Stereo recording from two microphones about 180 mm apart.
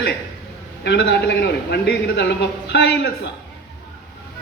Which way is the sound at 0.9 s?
70° left (ahead or behind).